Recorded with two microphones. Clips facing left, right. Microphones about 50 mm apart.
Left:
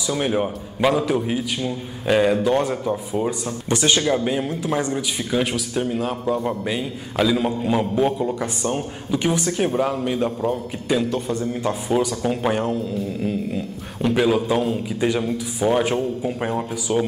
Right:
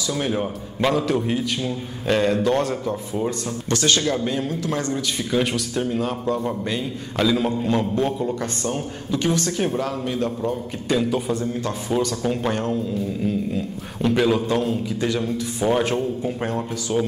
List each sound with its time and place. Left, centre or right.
0.1 s a man's voice: centre
5.3 s a man's voice: centre
11.1 s a man's voice: centre
11.5 s a man's voice: centre
14.9 s a man's voice: centre
15.2 s a man's voice: centre